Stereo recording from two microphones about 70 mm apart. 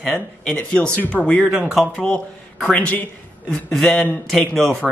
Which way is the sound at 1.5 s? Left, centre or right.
Centre.